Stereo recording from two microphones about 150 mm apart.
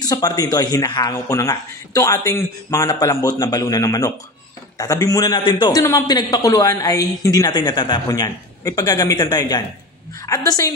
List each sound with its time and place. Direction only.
0.0 s a man's voice: 25° left (ahead or behind)